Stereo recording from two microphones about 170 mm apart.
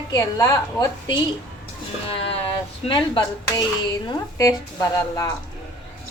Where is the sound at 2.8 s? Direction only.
30° left (ahead or behind).